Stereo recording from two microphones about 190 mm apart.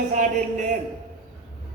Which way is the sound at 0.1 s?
40° right (ahead or behind).